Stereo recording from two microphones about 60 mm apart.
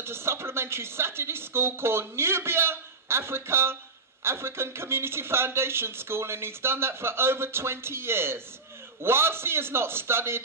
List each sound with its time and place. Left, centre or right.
0.0 s a man's voice: right